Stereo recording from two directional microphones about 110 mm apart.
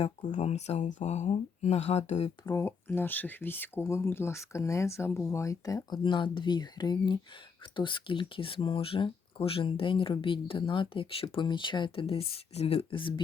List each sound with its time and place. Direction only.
0.0 s speech: 90° left
2.5 s speech: 25° left (ahead or behind)
6.0 s speech: 45° left (ahead or behind)